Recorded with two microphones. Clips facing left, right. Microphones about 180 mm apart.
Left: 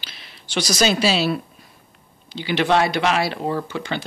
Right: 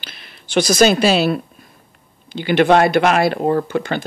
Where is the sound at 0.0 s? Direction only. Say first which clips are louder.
Right 3 dB; 55° right (ahead or behind).